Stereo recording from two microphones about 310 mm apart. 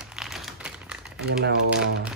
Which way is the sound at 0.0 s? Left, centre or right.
Centre.